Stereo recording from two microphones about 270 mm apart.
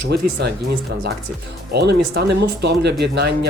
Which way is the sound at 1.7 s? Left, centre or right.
Right.